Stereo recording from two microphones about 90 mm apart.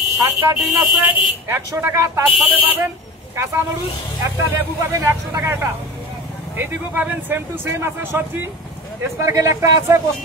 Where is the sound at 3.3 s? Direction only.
30° right (ahead or behind).